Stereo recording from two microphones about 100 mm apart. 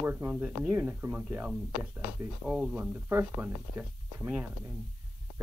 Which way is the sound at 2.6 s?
15° right (ahead or behind).